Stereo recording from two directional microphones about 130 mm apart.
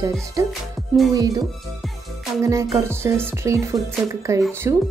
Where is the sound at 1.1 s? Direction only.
25° right (ahead or behind).